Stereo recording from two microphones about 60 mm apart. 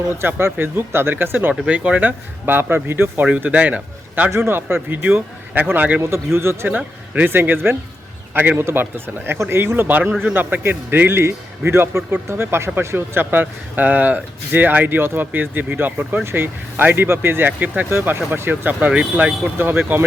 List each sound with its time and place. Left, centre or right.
0.2 s speech: right
1.6 s speech: right
3.2 s a man's voice: right
4.4 s a man's voice: right
6.3 s speech: right
6.7 s a man's voice: right
9.4 s speech: right
11.2 s speech: right
13.3 s speech: right
19.5 s speech: right